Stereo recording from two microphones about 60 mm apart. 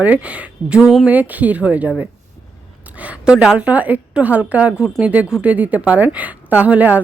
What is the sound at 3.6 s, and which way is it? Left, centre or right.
A woman's voice, right.